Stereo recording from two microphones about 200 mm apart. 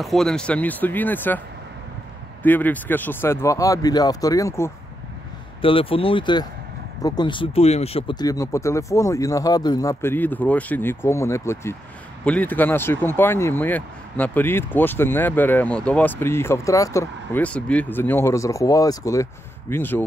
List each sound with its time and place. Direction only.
0.0 s speech: centre (ahead or behind)
2.4 s speech: 10° left (ahead or behind)
5.6 s speech: 25° left (ahead or behind); by 20.0 s 10° left (ahead or behind)